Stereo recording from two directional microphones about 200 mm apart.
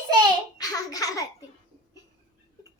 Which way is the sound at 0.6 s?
20° left (ahead or behind).